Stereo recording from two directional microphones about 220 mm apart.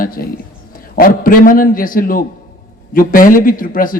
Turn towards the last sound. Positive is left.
turn(degrees=40)  # may be behind; listen again after turning